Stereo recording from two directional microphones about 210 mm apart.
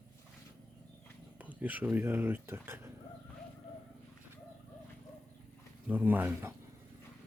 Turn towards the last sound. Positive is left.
turn(degrees=-10)  # may be behind; listen again after turning